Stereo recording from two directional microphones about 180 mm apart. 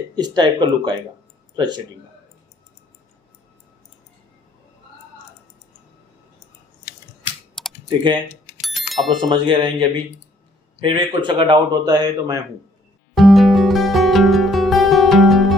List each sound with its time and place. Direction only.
0.2 s a man's voice: 25° right (ahead or behind)
7.9 s a man's voice: 25° right (ahead or behind)
8.9 s speech: centre (ahead or behind)
9.3 s a man's voice: 25° right (ahead or behind)
10.8 s a man's voice: 25° right (ahead or behind)
13.1 s music: centre (ahead or behind)